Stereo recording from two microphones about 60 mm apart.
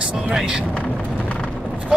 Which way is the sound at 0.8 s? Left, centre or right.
Left.